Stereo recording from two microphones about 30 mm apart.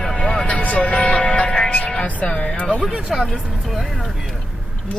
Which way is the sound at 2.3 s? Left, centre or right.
Left.